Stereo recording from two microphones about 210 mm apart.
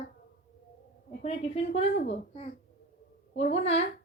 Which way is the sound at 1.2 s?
30° left (ahead or behind).